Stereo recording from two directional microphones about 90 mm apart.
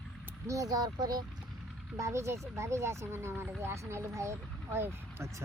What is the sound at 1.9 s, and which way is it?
Speech, 35° right (ahead or behind).